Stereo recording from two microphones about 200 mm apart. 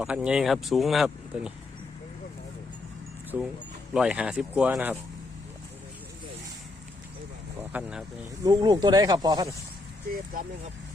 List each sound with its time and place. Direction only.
0.0 s speech: 5° right (ahead or behind)
3.3 s speech: 10° right (ahead or behind)
7.7 s speech: 5° right (ahead or behind)
8.4 s speech: 20° right (ahead or behind)